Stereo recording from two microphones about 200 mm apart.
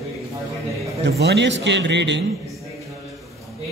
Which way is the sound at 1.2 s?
60° right (ahead or behind).